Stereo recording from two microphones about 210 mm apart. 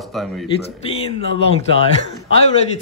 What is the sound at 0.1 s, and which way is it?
Speech, centre (ahead or behind).